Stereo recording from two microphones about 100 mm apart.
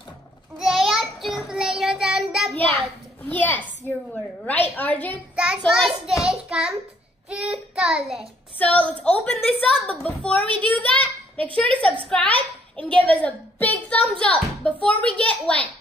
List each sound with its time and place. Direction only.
0.6 s child singing: 5° right (ahead or behind)
3.3 s a woman's voice: 15° left (ahead or behind)
5.3 s child singing: 10° right (ahead or behind)
5.7 s a child's voice: 5° right (ahead or behind)
6.2 s child singing: 5° right (ahead or behind)
8.5 s a woman's voice: 15° left (ahead or behind)